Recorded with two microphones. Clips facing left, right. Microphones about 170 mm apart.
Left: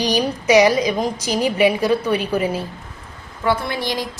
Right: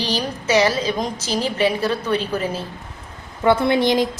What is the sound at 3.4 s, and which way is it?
Speech, 20° right (ahead or behind).